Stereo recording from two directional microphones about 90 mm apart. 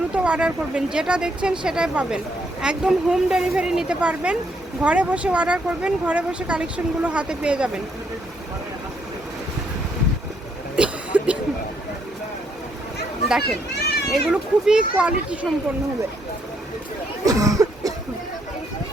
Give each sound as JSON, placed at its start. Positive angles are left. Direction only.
{"t": 0.1, "sound": "speech", "side_deg": -10}
{"t": 10.8, "sound": "a sound", "side_deg": -15}
{"t": 13.2, "sound": "speech", "side_deg": -5}
{"t": 17.2, "sound": "cough", "side_deg": -40}